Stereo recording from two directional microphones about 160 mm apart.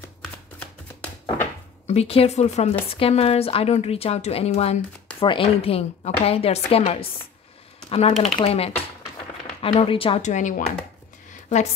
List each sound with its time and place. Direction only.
1.9 s a woman's voice: 40° left (ahead or behind)